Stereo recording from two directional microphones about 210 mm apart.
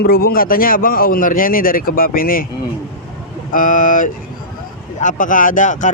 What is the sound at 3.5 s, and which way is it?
Speech, 40° left (ahead or behind).